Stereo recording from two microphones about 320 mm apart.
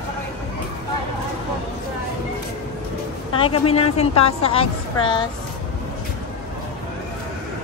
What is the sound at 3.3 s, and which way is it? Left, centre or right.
A woman's voice, centre.